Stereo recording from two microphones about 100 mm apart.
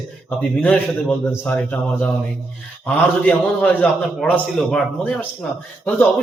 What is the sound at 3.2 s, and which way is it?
A man's voice, 15° left (ahead or behind).